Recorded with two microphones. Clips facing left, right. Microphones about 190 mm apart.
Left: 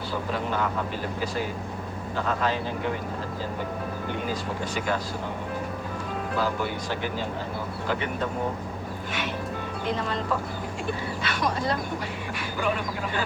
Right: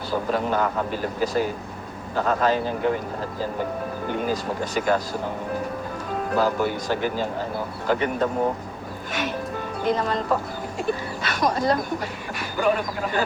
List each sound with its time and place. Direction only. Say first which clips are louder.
0.1 s speech: right 6 dB; 45° right (ahead or behind)
4.3 s speech: right 4 dB; 40° right (ahead or behind)
6.3 s speech: right 6 dB; 40° right (ahead or behind)
9.8 s speech: right 6 dB; 40° right (ahead or behind)